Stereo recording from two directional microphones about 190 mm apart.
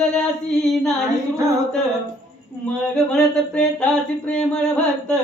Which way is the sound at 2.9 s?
5° left (ahead or behind).